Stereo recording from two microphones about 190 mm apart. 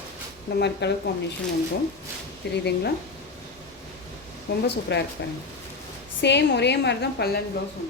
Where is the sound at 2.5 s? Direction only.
60° left (ahead or behind).